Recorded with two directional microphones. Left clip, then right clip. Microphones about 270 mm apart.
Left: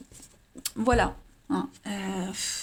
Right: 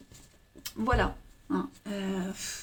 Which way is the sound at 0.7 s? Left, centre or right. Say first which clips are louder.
Left 4 dB; left.